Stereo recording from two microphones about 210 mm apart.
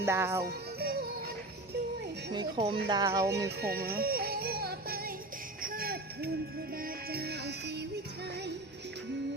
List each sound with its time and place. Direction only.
0.0 s speech: 10° right (ahead or behind)
0.4 s music: 45° right (ahead or behind)
2.3 s speech: 20° right (ahead or behind)
3.6 s music: 50° right (ahead or behind)
5.6 s a sound: 45° right (ahead or behind)
6.8 s music: 45° right (ahead or behind)